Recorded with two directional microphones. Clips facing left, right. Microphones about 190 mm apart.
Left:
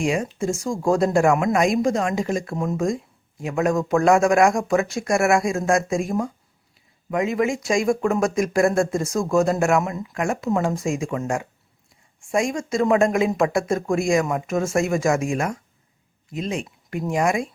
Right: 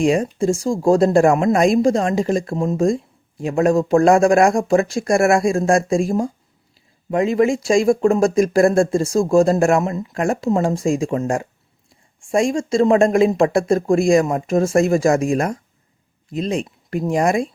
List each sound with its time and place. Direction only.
0.0 s speech: 35° right (ahead or behind)